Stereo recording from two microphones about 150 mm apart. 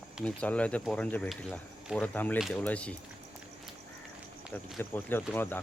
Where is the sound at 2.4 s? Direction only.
Centre (ahead or behind).